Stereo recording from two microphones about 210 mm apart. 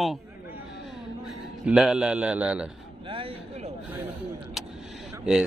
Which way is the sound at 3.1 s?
25° right (ahead or behind).